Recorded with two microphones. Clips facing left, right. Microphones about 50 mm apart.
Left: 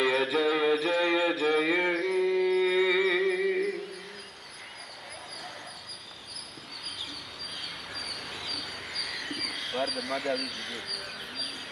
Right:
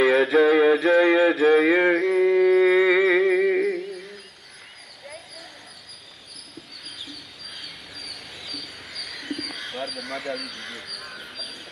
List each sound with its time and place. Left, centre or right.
0.0 s music: centre
1.1 s mantra: centre
2.5 s a sound: centre
3.3 s music: right
8.5 s dog: centre